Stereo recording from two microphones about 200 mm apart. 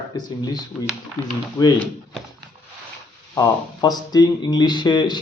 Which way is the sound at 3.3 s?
20° left (ahead or behind).